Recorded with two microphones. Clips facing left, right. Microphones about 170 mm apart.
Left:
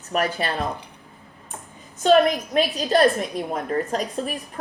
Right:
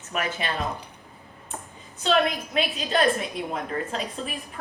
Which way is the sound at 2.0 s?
45° left (ahead or behind).